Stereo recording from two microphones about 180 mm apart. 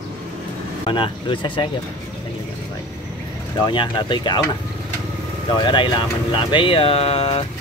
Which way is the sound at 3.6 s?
25° left (ahead or behind).